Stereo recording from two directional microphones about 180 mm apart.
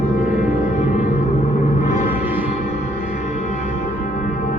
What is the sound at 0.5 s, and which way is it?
Music, 35° left (ahead or behind).